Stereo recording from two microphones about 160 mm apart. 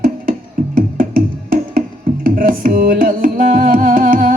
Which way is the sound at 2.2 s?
60° right (ahead or behind).